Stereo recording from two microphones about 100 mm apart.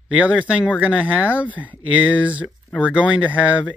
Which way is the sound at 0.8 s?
15° right (ahead or behind).